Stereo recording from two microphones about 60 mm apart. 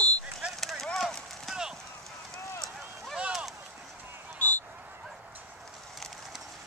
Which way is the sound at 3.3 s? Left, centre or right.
Centre.